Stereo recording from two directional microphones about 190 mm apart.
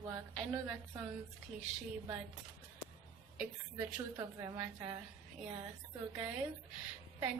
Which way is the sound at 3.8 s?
15° right (ahead or behind).